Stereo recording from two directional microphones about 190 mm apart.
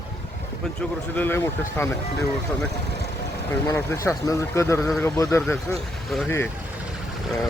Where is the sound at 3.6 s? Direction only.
15° left (ahead or behind).